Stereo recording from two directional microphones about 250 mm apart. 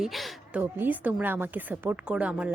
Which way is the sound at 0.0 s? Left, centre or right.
Centre.